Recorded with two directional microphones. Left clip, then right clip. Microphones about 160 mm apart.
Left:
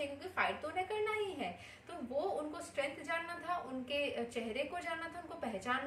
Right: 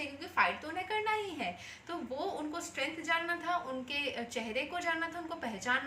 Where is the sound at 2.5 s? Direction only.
20° left (ahead or behind).